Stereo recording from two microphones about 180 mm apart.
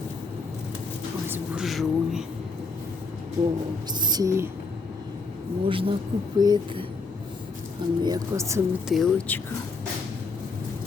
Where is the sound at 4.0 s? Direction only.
20° right (ahead or behind).